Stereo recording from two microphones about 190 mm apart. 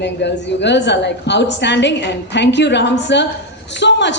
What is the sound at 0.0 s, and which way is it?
A woman's voice, 65° left (ahead or behind).